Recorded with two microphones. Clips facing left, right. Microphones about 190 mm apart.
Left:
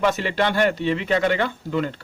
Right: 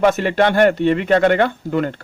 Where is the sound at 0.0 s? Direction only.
50° right (ahead or behind).